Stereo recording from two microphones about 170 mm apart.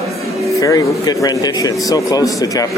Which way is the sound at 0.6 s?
20° left (ahead or behind).